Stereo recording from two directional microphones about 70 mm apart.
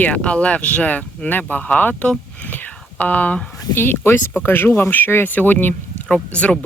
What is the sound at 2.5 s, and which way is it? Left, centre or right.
Whispering, left.